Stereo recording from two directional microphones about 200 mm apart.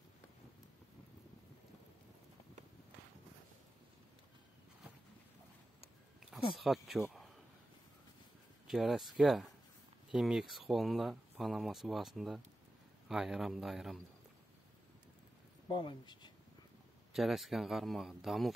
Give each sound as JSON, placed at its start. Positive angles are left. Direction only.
{"t": 6.5, "sound": "speech", "side_deg": 0}
{"t": 8.6, "sound": "speech", "side_deg": 0}
{"t": 15.7, "sound": "speech", "side_deg": 25}
{"t": 17.1, "sound": "speech", "side_deg": 0}